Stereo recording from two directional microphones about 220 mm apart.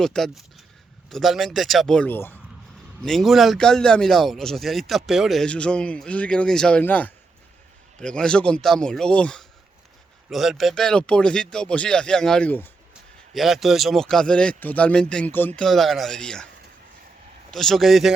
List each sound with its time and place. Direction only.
0.0 s a man's voice: centre (ahead or behind)
17.5 s a man's voice: centre (ahead or behind)